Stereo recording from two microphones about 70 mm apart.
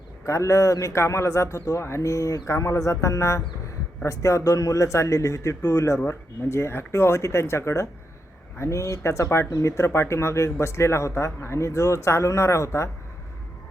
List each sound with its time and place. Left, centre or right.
0.3 s a man's voice: left